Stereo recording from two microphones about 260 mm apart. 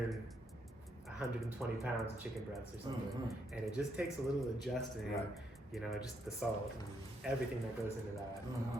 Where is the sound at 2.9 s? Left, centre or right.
Centre.